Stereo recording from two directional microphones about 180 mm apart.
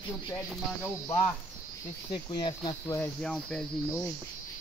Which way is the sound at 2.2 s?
25° left (ahead or behind).